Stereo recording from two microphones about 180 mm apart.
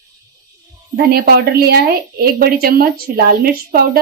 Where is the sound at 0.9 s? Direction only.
60° right (ahead or behind).